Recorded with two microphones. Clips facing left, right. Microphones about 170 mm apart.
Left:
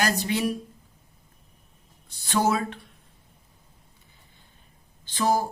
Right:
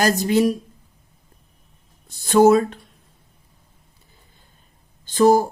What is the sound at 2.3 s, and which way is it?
Speech, 45° right (ahead or behind).